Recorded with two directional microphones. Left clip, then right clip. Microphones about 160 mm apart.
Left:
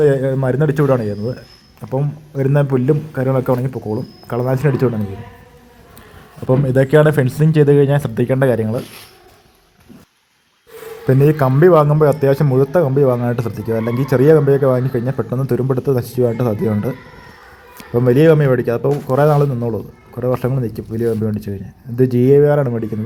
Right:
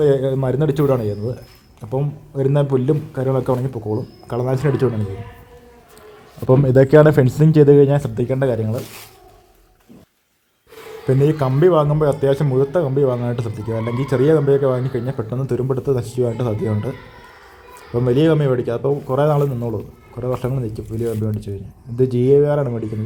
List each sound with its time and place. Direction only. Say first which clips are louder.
0.0 s a man's voice: left 2 dB; 5° left (ahead or behind)
6.4 s speech: right 2 dB; 5° right (ahead or behind); by 8.8 s 15° left (ahead or behind)
11.0 s a man's voice: left 3 dB; 20° left (ahead or behind)
17.9 s a man's voice: left 5 dB; 15° left (ahead or behind)